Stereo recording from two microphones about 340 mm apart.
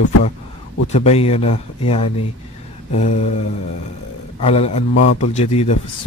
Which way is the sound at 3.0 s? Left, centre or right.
Centre.